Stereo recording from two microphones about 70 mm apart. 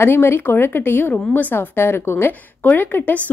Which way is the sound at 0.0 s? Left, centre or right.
Left.